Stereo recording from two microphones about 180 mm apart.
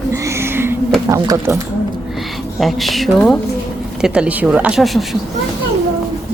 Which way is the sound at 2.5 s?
Centre (ahead or behind).